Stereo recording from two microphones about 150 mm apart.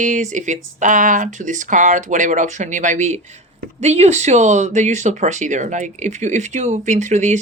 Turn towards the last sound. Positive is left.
turn(degrees=-55)  # may be behind; listen again after turning